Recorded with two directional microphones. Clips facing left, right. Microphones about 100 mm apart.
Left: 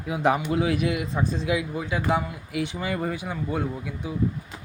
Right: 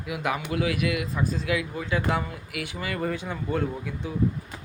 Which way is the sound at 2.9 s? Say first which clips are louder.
Left 1 dB; 10° left (ahead or behind).